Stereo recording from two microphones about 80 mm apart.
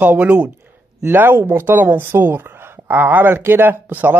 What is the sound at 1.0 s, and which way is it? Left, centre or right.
Speech, right.